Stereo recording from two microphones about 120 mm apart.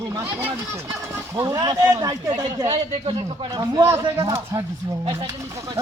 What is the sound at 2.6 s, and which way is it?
Speech, 45° right (ahead or behind).